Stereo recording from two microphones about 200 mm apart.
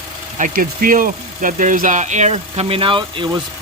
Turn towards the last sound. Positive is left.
turn(degrees=-25)  # may be behind; listen again after turning